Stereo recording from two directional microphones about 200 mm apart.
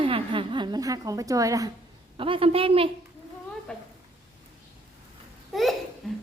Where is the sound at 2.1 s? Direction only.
25° right (ahead or behind).